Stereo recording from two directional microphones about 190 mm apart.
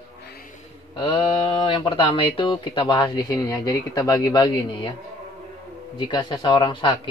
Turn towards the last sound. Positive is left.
turn(degrees=25)  # may be behind; listen again after turning